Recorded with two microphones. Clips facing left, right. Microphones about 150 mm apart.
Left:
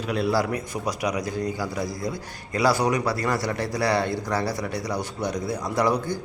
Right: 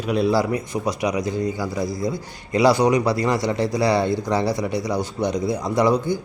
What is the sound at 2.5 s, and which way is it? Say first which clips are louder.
Speech: right 5 dB; 20° right (ahead or behind).